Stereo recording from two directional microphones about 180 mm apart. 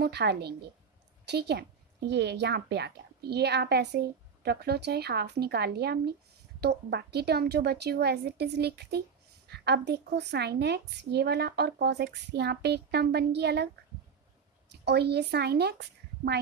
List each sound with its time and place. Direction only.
0.0 s a woman's voice: 65° right (ahead or behind)
14.7 s speech: 65° right (ahead or behind)